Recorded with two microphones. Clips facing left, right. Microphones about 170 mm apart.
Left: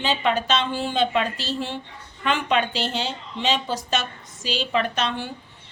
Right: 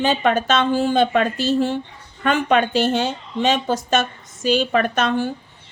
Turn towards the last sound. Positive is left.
turn(degrees=-50)  # may be behind; listen again after turning